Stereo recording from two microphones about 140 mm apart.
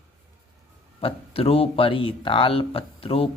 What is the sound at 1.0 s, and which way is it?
Speech, 40° left (ahead or behind).